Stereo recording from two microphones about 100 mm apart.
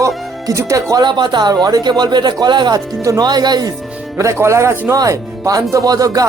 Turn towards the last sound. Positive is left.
turn(degrees=-35)  # may be behind; listen again after turning